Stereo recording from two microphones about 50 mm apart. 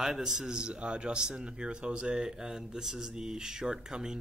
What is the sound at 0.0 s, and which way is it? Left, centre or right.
Speech, centre.